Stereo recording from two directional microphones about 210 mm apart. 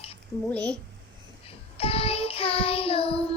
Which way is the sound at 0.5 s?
5° left (ahead or behind).